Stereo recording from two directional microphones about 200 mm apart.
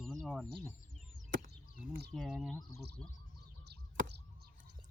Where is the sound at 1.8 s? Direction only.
55° right (ahead or behind).